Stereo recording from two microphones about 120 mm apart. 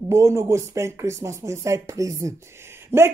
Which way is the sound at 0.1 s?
25° right (ahead or behind).